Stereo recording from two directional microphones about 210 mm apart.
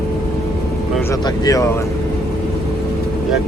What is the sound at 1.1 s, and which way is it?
Speech, 15° left (ahead or behind).